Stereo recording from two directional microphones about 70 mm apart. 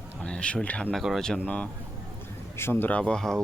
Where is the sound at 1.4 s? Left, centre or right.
Centre.